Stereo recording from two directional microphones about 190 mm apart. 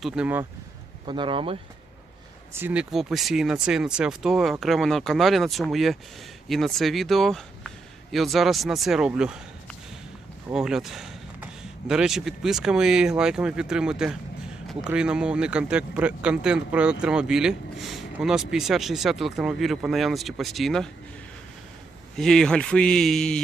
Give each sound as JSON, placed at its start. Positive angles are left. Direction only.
{"t": 0.0, "sound": "speech", "side_deg": -5}
{"t": 1.0, "sound": "speech", "side_deg": -25}
{"t": 2.5, "sound": "speech", "side_deg": -10}
{"t": 10.5, "sound": "speech", "side_deg": -5}
{"t": 22.1, "sound": "speech", "side_deg": 0}